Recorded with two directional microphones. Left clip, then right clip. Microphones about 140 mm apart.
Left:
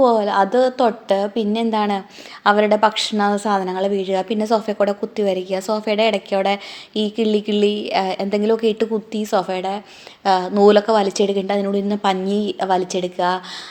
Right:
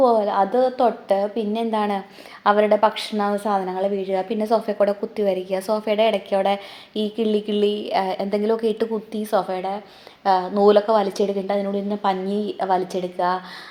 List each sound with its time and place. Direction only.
0.0 s a woman's voice: 30° left (ahead or behind)